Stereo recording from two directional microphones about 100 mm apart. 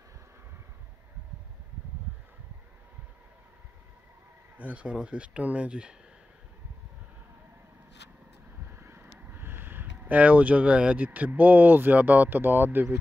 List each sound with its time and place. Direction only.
4.6 s speech: 15° right (ahead or behind)
8.6 s vehicle: 20° right (ahead or behind)
9.2 s speech: 20° right (ahead or behind)